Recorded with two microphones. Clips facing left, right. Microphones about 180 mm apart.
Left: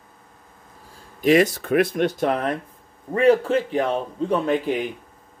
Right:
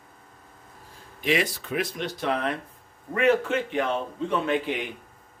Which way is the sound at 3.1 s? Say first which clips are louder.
Left 5 dB; 35° left (ahead or behind).